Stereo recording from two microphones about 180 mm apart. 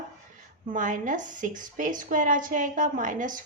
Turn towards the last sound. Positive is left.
turn(degrees=-45)  # may be behind; listen again after turning